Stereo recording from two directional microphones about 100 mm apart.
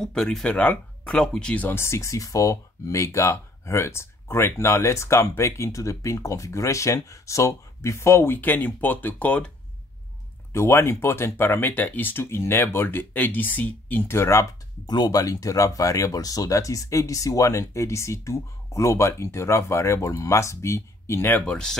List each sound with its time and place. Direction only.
0.0 s speech: 5° left (ahead or behind)
10.5 s speech: 25° left (ahead or behind)
14.9 s speech: 40° left (ahead or behind); by 21.7 s 10° left (ahead or behind)